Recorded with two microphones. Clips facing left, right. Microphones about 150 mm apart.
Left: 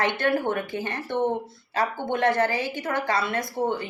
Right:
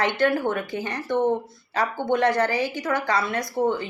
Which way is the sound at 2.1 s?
25° left (ahead or behind).